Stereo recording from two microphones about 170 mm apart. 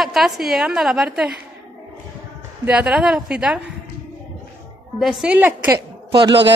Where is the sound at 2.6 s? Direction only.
5° right (ahead or behind).